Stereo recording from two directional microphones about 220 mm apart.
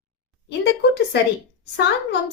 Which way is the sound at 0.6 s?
50° left (ahead or behind).